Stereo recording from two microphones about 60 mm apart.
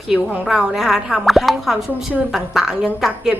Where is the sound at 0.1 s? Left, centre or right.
Centre.